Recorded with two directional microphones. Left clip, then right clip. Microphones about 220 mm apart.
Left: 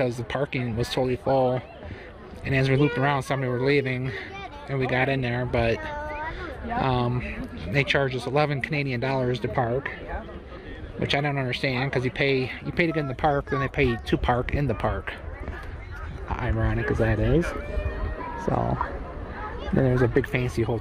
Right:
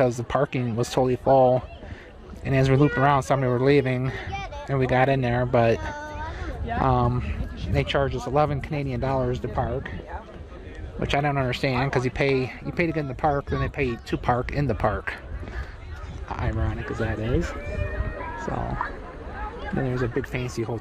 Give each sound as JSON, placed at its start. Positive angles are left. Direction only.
{"t": 0.0, "sound": "speech", "side_deg": -20}
{"t": 9.6, "sound": "speech", "side_deg": 5}
{"t": 11.0, "sound": "speech", "side_deg": -5}
{"t": 12.7, "sound": "speech", "side_deg": -5}
{"t": 16.3, "sound": "speech", "side_deg": -5}
{"t": 16.5, "sound": "speech", "side_deg": 10}
{"t": 18.8, "sound": "speech", "side_deg": 50}
{"t": 19.8, "sound": "speech", "side_deg": 20}